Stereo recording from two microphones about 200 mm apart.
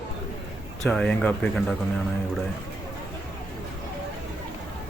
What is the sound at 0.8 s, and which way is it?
Speech, 5° left (ahead or behind).